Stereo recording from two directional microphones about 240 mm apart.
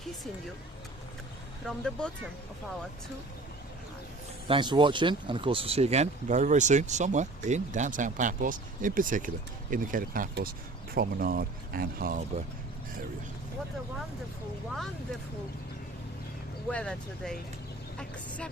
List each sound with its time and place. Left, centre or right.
1.6 s speech: centre
4.4 s speech: centre; by 12.2 s right
16.6 s speech: centre